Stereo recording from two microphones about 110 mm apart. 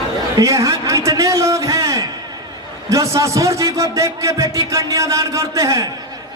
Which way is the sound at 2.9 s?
30° right (ahead or behind).